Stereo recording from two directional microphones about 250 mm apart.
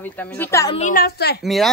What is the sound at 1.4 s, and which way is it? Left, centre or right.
Speech, centre.